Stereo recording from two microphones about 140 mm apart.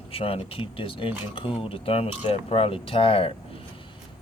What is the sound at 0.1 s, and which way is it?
Speech, 45° left (ahead or behind).